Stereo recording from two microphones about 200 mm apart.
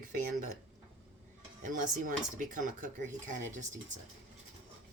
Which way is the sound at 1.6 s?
40° right (ahead or behind).